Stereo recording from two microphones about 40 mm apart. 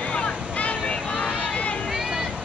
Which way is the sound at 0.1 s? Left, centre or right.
Left.